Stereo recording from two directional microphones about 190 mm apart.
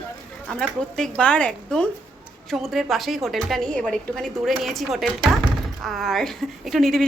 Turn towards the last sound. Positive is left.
turn(degrees=0)  # may be behind; listen again after turning